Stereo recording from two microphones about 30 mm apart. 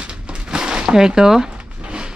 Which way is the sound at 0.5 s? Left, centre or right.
Right.